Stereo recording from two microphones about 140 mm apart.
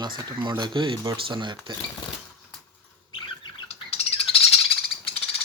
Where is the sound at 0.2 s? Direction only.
30° right (ahead or behind).